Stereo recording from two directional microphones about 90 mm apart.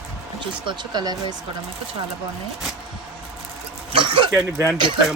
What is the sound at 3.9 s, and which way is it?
Speech, 75° right (ahead or behind).